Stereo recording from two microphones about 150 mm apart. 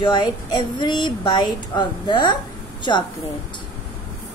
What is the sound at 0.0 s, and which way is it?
A woman's voice, 30° left (ahead or behind).